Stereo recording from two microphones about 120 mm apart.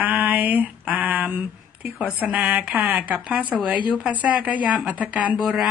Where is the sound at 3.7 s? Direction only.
40° left (ahead or behind).